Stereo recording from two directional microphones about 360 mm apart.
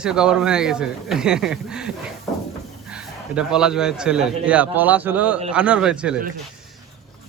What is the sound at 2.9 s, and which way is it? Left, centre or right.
A man's voice, centre.